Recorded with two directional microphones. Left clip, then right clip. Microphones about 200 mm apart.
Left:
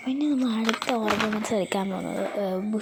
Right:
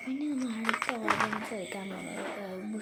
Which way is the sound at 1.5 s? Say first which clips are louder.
Left 12 dB; 40° left (ahead or behind).